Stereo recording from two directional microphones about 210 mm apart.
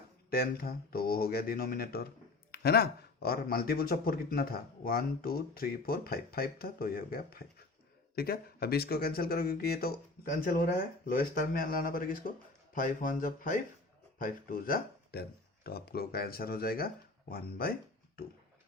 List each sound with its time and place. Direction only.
0.3 s speech: 45° left (ahead or behind)